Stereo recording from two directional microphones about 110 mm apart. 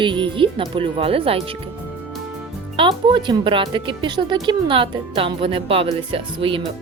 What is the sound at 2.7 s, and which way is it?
Speech, 50° right (ahead or behind).